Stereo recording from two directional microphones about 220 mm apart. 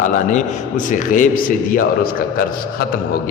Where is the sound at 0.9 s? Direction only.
35° left (ahead or behind).